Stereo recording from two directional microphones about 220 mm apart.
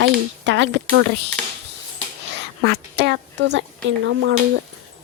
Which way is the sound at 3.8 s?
60° right (ahead or behind).